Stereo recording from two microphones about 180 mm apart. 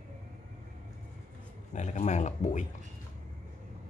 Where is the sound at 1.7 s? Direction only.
40° left (ahead or behind).